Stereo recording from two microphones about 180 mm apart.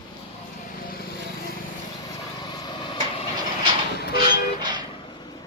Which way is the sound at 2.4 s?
25° left (ahead or behind).